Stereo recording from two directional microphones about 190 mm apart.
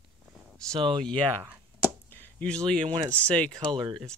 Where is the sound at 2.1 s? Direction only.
10° left (ahead or behind).